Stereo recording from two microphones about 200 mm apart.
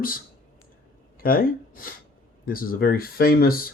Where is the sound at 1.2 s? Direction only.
45° left (ahead or behind).